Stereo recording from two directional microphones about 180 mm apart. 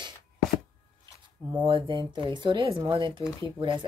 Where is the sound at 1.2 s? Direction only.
25° right (ahead or behind).